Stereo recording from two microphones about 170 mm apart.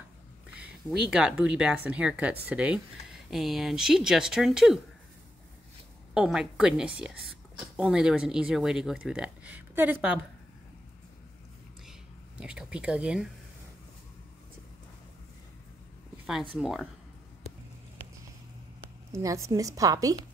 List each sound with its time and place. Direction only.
0.6 s speech: 5° right (ahead or behind)
6.1 s speech: 5° right (ahead or behind)
12.4 s speech: 5° right (ahead or behind)
16.3 s speech: centre (ahead or behind)
19.1 s a woman's voice: 20° right (ahead or behind)